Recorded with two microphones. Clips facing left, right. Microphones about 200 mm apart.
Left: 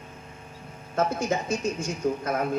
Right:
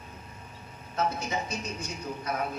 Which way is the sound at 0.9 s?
45° left (ahead or behind).